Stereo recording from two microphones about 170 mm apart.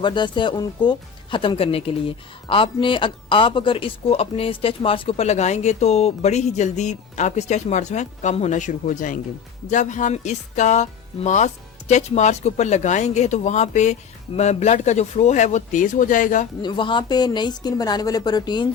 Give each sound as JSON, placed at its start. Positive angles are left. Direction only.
{"t": 0.0, "sound": "speech", "side_deg": 25}
{"t": 16.6, "sound": "a woman's voice", "side_deg": 30}